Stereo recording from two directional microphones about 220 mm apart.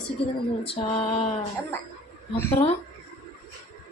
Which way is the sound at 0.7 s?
25° left (ahead or behind).